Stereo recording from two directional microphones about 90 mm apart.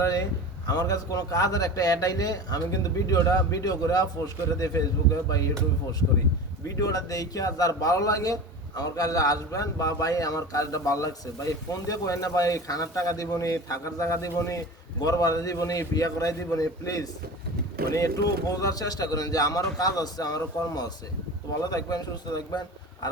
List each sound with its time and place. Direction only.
0.0 s speech: 40° left (ahead or behind)
6.7 s speech: 40° left (ahead or behind)